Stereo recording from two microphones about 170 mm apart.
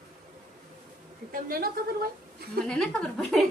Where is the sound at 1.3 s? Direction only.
60° right (ahead or behind).